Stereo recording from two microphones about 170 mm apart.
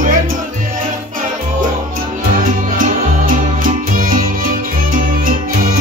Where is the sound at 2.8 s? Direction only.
50° right (ahead or behind).